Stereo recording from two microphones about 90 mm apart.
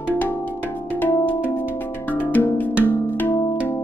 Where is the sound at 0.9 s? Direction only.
20° left (ahead or behind).